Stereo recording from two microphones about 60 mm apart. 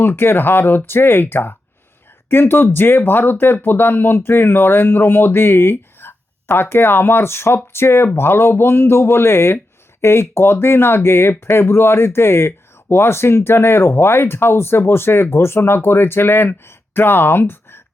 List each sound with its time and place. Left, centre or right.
0.0 s speech: left